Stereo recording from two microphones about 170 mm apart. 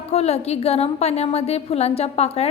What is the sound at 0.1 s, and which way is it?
A woman's voice, 40° left (ahead or behind).